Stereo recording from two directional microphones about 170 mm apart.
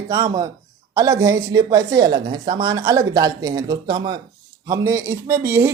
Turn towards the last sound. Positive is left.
turn(degrees=-15)  # may be behind; listen again after turning